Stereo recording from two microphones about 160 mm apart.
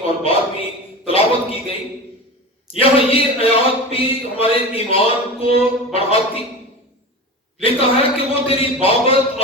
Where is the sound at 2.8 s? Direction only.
35° left (ahead or behind).